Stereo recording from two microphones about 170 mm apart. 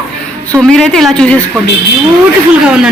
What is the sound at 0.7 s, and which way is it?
Speech, centre (ahead or behind).